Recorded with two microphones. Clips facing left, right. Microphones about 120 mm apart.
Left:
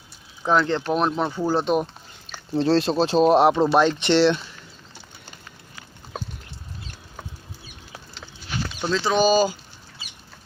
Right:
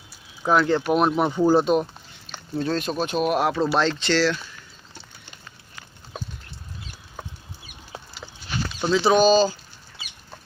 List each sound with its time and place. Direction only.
0.4 s speech: 5° right (ahead or behind)
2.6 s speech: 30° left (ahead or behind)
8.8 s speech: 10° right (ahead or behind)
9.1 s speech: 10° left (ahead or behind)